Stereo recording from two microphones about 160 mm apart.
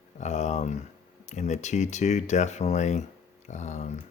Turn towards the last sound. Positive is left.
turn(degrees=45)  # may be behind; listen again after turning